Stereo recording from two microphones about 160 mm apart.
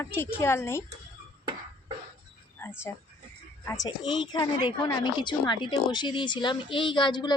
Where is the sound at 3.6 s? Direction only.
25° left (ahead or behind).